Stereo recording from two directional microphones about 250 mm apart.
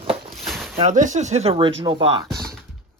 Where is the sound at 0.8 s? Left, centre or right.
Right.